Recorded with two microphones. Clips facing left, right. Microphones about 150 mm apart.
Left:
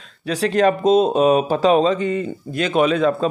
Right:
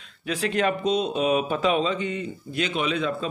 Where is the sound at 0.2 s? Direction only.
35° left (ahead or behind).